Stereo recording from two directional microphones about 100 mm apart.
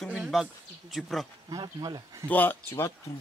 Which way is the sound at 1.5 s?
40° right (ahead or behind).